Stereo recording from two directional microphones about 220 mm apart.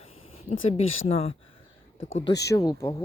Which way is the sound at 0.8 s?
25° left (ahead or behind).